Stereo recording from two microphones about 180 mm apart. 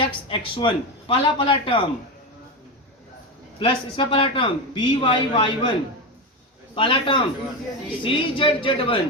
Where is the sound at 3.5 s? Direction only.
30° left (ahead or behind).